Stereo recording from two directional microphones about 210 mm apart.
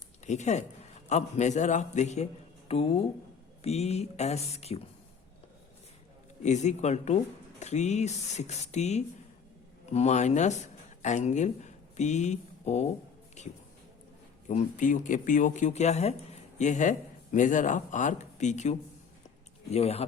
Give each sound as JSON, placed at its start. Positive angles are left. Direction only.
{"t": 0.3, "sound": "speech", "side_deg": 35}
{"t": 6.4, "sound": "speech", "side_deg": 35}